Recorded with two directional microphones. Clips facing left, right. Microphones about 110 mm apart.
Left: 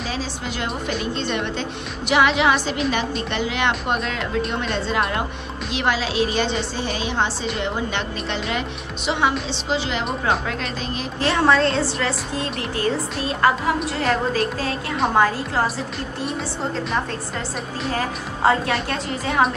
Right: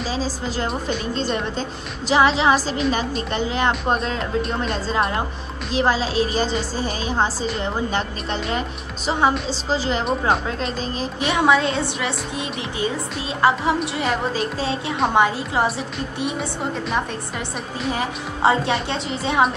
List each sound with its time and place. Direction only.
0.1 s a woman's voice: 35° right (ahead or behind)
10.0 s speech: centre (ahead or behind)
11.1 s a woman's voice: 15° right (ahead or behind)
17.9 s a woman's voice: 20° right (ahead or behind)